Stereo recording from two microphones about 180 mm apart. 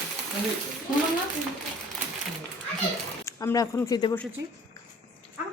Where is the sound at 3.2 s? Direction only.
15° left (ahead or behind).